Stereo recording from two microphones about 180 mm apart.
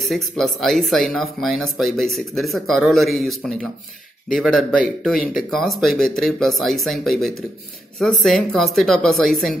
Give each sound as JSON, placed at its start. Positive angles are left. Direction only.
{"t": 0.0, "sound": "speech", "side_deg": 0}